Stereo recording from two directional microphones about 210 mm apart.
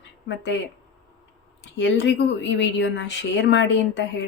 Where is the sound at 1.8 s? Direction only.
60° left (ahead or behind).